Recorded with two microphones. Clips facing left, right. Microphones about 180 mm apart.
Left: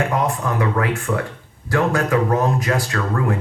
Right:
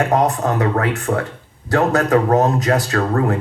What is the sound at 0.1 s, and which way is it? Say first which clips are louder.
Speech: right 5 dB; 40° right (ahead or behind).